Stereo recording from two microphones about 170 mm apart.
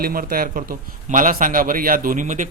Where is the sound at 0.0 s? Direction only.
60° right (ahead or behind).